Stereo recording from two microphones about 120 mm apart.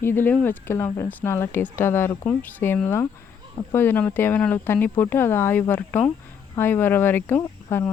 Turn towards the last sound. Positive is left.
turn(degrees=15)  # may be behind; listen again after turning